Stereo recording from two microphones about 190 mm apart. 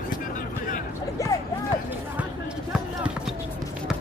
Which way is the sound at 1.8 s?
5° right (ahead or behind).